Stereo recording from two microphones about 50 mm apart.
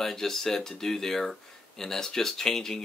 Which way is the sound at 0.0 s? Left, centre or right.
Centre.